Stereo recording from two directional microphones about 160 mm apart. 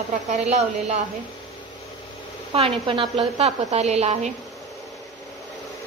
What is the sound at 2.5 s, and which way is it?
A woman's voice, 35° right (ahead or behind).